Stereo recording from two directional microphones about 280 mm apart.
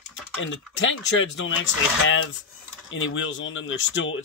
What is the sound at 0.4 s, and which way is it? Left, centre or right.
Speech, left.